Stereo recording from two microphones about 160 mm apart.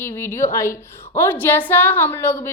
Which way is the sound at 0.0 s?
15° left (ahead or behind).